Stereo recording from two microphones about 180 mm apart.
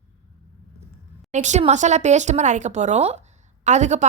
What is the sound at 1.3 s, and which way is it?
Speech, 40° right (ahead or behind).